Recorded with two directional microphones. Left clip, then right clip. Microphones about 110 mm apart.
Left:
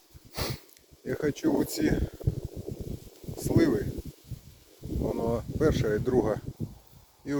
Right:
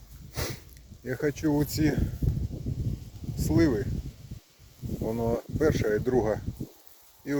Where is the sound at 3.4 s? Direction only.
15° left (ahead or behind).